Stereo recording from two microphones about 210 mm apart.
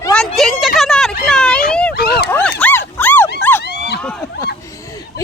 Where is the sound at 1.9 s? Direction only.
50° left (ahead or behind).